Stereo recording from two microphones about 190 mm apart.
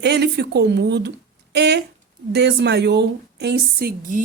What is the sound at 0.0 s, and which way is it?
A woman's voice, 60° right (ahead or behind).